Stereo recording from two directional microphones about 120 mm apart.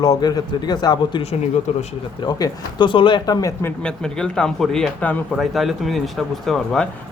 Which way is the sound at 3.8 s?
5° left (ahead or behind).